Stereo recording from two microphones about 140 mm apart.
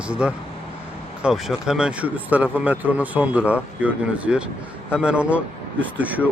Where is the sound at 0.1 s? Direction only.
5° right (ahead or behind).